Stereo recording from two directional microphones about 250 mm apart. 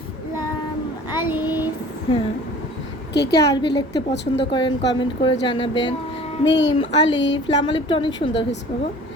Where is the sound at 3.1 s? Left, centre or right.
Left.